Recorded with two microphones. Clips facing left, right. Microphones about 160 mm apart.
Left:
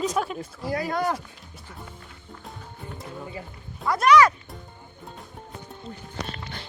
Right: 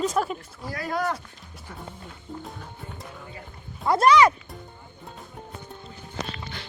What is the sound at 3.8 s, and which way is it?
Speech, 30° right (ahead or behind).